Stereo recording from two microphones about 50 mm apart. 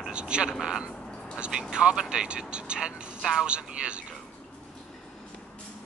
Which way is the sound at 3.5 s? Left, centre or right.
Right.